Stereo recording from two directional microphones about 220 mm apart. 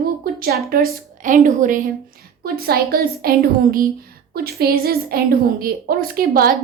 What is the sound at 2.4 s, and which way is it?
A woman's voice, 45° right (ahead or behind).